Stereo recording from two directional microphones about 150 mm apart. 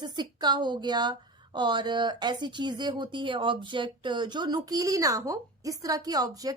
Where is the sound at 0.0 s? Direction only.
30° right (ahead or behind).